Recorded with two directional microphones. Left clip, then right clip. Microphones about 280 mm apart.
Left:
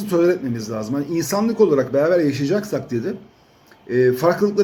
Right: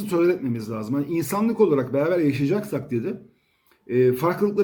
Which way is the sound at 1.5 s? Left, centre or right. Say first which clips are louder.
Left 4 dB; centre.